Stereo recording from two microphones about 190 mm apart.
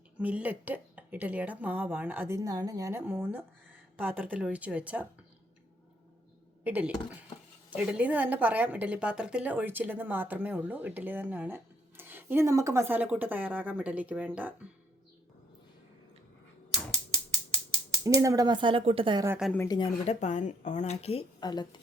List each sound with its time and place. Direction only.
0.2 s a woman's voice: 10° right (ahead or behind)
6.7 s a woman's voice: 10° right (ahead or behind)
18.0 s speech: 15° right (ahead or behind)
19.5 s speech: 20° left (ahead or behind)
20.1 s a woman's voice: 40° left (ahead or behind); by 21.8 s 20° left (ahead or behind)